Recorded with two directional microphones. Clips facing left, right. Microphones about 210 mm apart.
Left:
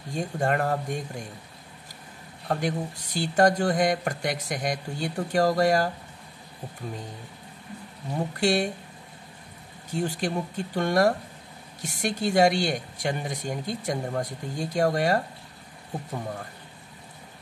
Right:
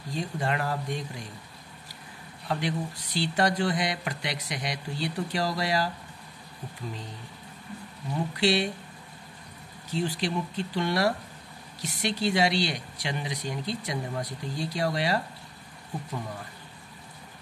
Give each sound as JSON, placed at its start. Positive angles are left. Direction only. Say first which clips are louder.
{"t": 0.1, "sound": "speech", "louder": "left 4 dB", "side_deg": 50}
{"t": 2.4, "sound": "speech", "louder": "left 2 dB", "side_deg": 45}
{"t": 8.2, "sound": "speech", "louder": "left 1 dB", "side_deg": 50}
{"t": 9.9, "sound": "speech", "louder": "left 1 dB", "side_deg": 45}